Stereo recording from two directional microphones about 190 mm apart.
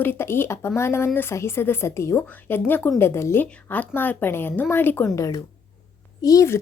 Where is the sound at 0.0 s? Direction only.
10° left (ahead or behind).